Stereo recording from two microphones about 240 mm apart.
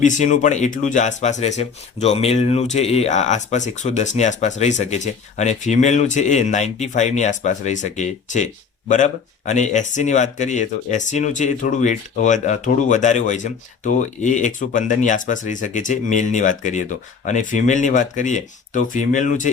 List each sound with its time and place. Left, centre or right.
0.0 s speech: left